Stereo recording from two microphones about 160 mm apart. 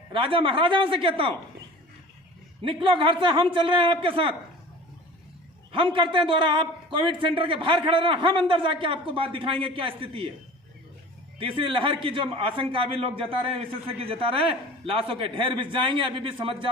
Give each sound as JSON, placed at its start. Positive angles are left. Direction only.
{"t": 0.1, "sound": "a man's voice", "side_deg": -35}
{"t": 2.6, "sound": "a man's voice", "side_deg": -30}
{"t": 5.7, "sound": "a man's voice", "side_deg": -30}
{"t": 11.3, "sound": "a man's voice", "side_deg": -30}